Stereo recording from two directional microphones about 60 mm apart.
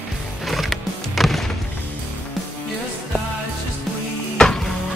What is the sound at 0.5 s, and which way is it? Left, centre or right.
Music, centre.